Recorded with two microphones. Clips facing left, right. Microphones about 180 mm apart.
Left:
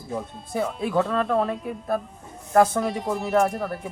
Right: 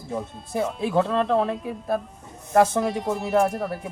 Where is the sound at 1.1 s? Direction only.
25° right (ahead or behind).